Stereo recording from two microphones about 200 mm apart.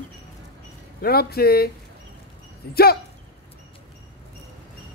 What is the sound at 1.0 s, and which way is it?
Speech, 50° left (ahead or behind).